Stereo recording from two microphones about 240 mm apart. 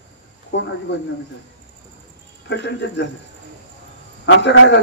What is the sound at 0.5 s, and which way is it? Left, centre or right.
Speech, left.